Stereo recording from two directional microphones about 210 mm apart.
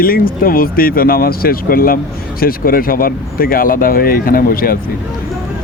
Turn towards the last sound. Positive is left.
turn(degrees=45)  # may be behind; listen again after turning